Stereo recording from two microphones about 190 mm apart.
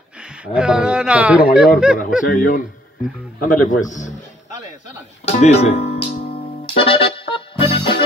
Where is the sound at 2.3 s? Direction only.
45° left (ahead or behind).